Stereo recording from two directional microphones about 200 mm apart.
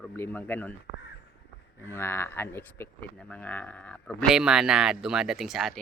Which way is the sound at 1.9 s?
10° left (ahead or behind).